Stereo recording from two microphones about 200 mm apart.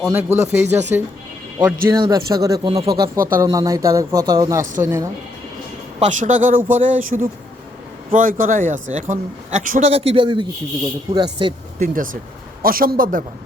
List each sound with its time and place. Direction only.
0.1 s speech: 10° right (ahead or behind)
2.9 s speech: 45° right (ahead or behind)
3.4 s speech: 15° right (ahead or behind)
6.0 s a man's voice: 40° right (ahead or behind)
12.6 s speech: 45° right (ahead or behind)